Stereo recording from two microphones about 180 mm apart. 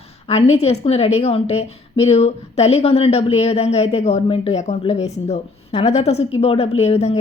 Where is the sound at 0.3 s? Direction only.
35° left (ahead or behind).